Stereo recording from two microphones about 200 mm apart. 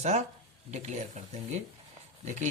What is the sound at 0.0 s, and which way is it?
Speech, 35° right (ahead or behind).